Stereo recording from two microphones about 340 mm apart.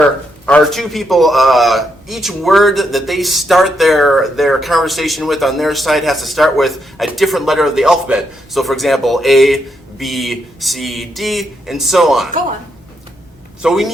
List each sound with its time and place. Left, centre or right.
0.0 s a man's voice: centre
13.6 s a man's voice: centre